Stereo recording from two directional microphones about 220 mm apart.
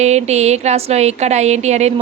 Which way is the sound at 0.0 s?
30° right (ahead or behind).